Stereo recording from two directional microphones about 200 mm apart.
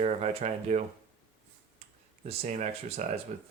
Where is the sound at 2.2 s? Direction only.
35° right (ahead or behind).